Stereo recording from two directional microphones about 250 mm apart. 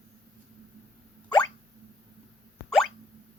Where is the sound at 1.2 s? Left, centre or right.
Centre.